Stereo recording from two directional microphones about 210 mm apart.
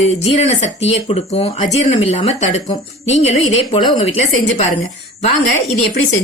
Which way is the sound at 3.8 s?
30° left (ahead or behind).